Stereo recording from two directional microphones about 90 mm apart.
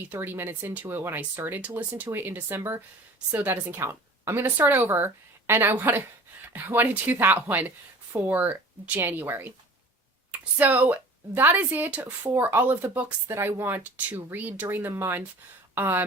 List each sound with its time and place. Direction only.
0.0 s speech: 20° right (ahead or behind)
10.6 s speech: 20° right (ahead or behind)
13.2 s speech: 30° right (ahead or behind)